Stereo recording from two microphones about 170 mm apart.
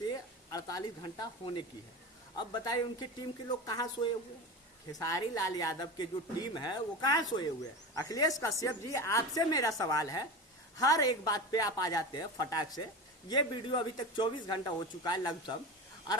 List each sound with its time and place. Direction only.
0.0 s a woman's voice: 20° left (ahead or behind)